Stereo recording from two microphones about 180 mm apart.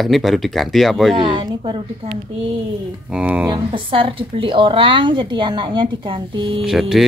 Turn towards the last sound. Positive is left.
turn(degrees=0)  # may be behind; listen again after turning